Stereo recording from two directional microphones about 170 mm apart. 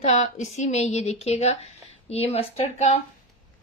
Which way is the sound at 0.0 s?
40° left (ahead or behind).